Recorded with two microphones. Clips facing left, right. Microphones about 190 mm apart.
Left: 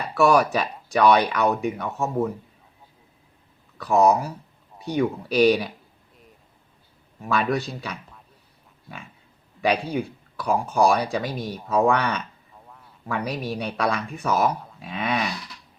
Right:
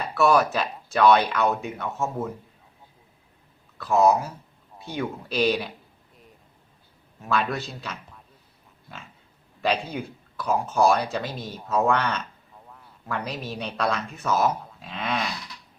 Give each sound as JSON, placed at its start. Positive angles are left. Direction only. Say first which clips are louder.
{"t": 0.1, "sound": "speech", "louder": "left 2 dB", "side_deg": 10}
{"t": 3.8, "sound": "speech", "louder": "left 1 dB", "side_deg": 15}
{"t": 7.3, "sound": "speech", "louder": "left 3 dB", "side_deg": 15}
{"t": 9.8, "sound": "speech", "louder": "left 6 dB", "side_deg": 10}
{"t": 12.6, "sound": "a sound", "louder": "even", "side_deg": 0}
{"t": 13.1, "sound": "speech", "louder": "left 4 dB", "side_deg": 10}